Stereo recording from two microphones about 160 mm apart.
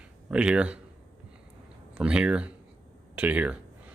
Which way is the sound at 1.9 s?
5° right (ahead or behind).